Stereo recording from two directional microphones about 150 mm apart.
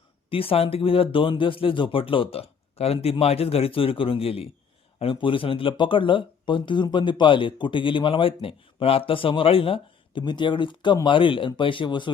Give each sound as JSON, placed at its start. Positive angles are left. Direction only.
{"t": 0.3, "sound": "speech", "side_deg": 40}